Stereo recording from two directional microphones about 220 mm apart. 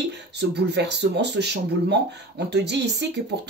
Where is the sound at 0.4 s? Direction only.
50° right (ahead or behind).